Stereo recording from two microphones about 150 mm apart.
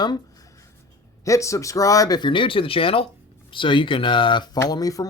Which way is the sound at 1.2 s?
20° left (ahead or behind).